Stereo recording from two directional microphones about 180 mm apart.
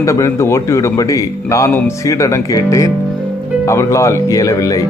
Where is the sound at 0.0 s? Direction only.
15° left (ahead or behind).